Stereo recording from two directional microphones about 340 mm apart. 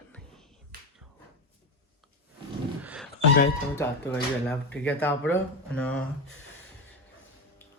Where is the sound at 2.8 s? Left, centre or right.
Centre.